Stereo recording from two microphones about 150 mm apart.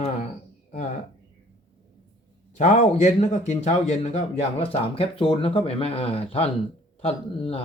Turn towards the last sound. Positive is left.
turn(degrees=40)  # may be behind; listen again after turning